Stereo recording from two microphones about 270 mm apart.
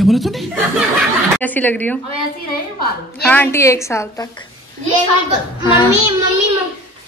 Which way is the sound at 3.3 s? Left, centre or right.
Centre.